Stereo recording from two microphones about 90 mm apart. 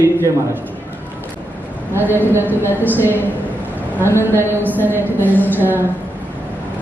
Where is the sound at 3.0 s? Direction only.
25° left (ahead or behind).